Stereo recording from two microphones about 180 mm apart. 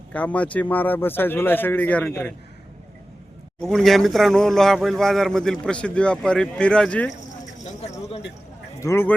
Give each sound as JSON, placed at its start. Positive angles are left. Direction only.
{"t": 0.1, "sound": "speech", "side_deg": 10}
{"t": 3.6, "sound": "speech", "side_deg": 0}
{"t": 7.4, "sound": "a sound", "side_deg": 40}
{"t": 8.8, "sound": "speech", "side_deg": 15}